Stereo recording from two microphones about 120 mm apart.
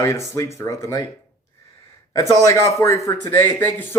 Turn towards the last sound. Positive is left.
turn(degrees=20)  # may be behind; listen again after turning